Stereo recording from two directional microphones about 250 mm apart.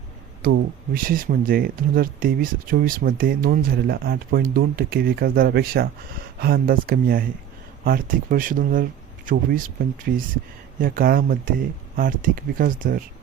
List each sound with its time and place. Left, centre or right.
0.4 s speech: right
10.8 s speech: right